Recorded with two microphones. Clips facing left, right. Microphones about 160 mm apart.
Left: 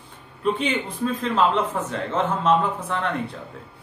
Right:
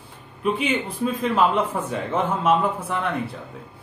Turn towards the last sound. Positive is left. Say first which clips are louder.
# right 1 dB
turn(degrees=-10)  # may be behind; listen again after turning